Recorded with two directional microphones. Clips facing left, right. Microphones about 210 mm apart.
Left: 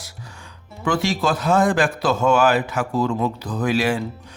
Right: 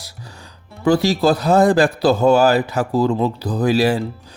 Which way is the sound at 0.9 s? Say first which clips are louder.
Right 6 dB; 35° right (ahead or behind).